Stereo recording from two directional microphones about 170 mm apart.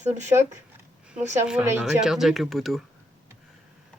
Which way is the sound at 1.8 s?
5° right (ahead or behind).